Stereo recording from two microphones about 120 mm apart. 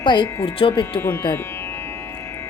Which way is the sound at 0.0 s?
40° left (ahead or behind).